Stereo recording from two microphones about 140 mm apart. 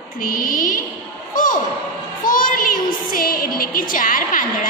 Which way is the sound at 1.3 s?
70° left (ahead or behind).